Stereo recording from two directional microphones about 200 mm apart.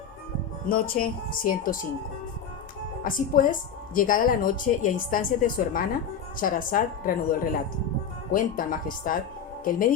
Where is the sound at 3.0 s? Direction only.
45° left (ahead or behind).